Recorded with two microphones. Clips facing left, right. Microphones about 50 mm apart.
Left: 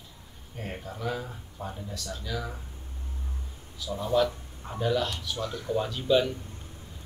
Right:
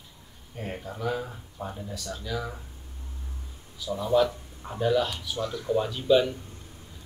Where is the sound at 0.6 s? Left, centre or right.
Centre.